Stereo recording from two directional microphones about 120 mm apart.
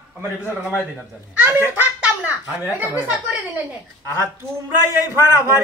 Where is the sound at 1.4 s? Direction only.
15° right (ahead or behind).